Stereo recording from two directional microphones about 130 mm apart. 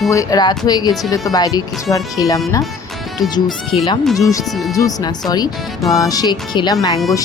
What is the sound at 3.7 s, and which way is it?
Speech, 50° left (ahead or behind).